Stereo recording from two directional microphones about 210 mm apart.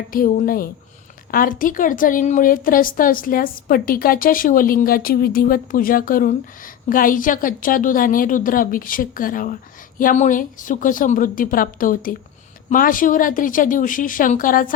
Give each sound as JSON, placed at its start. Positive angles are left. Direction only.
{"t": 0.1, "sound": "a woman's voice", "side_deg": 40}